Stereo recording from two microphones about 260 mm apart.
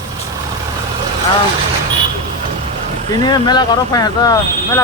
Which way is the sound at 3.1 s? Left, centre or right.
Centre.